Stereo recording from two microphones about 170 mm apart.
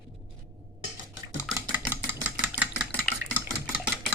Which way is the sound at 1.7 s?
10° right (ahead or behind).